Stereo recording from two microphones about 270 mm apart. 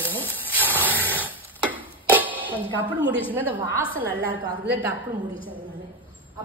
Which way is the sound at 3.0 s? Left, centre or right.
Centre.